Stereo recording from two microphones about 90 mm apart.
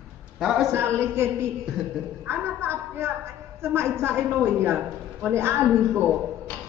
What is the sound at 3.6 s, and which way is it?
Speech, 25° right (ahead or behind).